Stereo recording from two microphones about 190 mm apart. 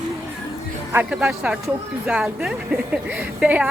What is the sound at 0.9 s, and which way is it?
Speech, 5° right (ahead or behind).